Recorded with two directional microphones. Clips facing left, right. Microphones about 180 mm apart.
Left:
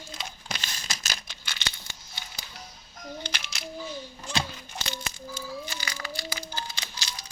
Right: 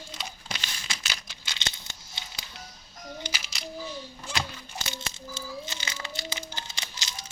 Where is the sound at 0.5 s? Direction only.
45° left (ahead or behind).